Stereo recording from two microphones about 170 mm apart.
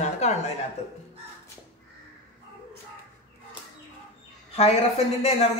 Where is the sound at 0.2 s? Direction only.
40° left (ahead or behind).